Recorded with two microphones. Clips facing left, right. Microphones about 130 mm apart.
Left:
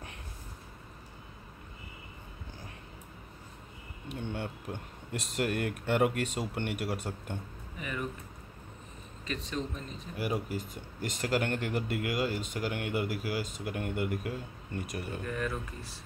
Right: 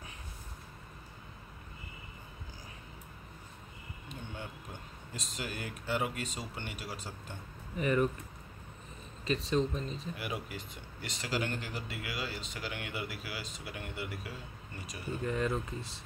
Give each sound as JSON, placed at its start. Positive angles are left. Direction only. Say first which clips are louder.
{"t": 4.1, "sound": "speech", "louder": "left 8 dB", "side_deg": 65}
{"t": 7.8, "sound": "speech", "louder": "right 8 dB", "side_deg": -45}
{"t": 9.3, "sound": "speech", "louder": "right 5 dB", "side_deg": -30}
{"t": 10.1, "sound": "speech", "louder": "left 6 dB", "side_deg": 40}
{"t": 15.2, "sound": "speech", "louder": "right 5 dB", "side_deg": -25}